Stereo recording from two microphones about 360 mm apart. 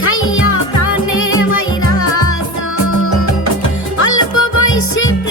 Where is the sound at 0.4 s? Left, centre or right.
Left.